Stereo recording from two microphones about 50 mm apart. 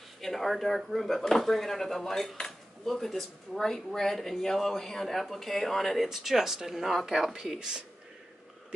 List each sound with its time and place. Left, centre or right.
0.2 s speech: centre
7.3 s speech: centre